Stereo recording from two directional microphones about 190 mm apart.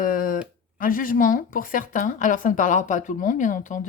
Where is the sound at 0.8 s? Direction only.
45° left (ahead or behind).